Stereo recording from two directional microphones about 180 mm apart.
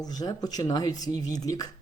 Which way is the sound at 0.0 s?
20° left (ahead or behind).